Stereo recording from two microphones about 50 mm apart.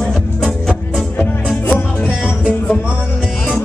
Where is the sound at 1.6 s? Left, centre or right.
Left.